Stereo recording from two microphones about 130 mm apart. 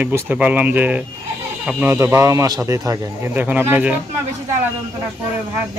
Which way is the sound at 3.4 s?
15° right (ahead or behind).